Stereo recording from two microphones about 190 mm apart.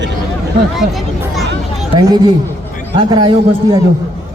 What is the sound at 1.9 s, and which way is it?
A man's voice, 20° right (ahead or behind).